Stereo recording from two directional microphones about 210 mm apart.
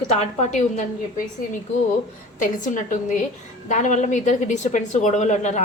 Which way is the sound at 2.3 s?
40° left (ahead or behind).